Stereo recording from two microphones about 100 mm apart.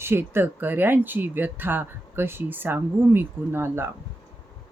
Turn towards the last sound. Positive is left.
turn(degrees=-20)  # may be behind; listen again after turning